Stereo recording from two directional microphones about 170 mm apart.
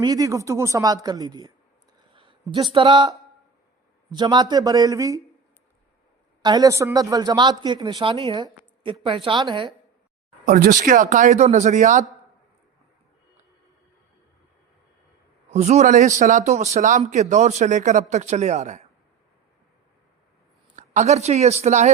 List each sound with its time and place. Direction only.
0.0 s speech: 20° right (ahead or behind)
6.4 s speech: 25° right (ahead or behind)
10.4 s speech: 55° right (ahead or behind)
15.5 s speech: 40° right (ahead or behind)
20.7 s speech: 45° right (ahead or behind)